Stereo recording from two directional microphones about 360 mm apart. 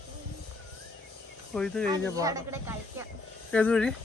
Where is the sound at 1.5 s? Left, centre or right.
Centre.